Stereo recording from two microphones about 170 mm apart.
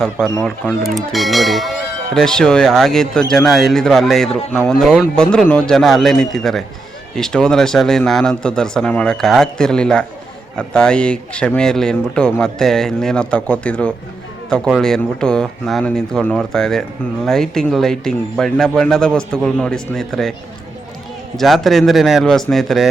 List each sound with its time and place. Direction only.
0.9 s speech: centre (ahead or behind)
21.3 s speech: centre (ahead or behind)